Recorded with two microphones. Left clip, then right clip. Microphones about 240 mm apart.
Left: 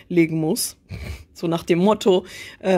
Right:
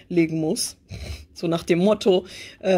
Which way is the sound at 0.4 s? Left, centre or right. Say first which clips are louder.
Left 1 dB; centre.